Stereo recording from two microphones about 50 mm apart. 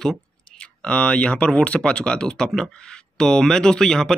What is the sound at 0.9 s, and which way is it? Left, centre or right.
Speech, centre.